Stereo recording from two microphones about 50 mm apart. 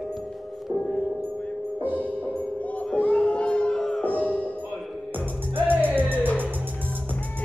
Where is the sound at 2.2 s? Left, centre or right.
Left; by 4.0 s centre.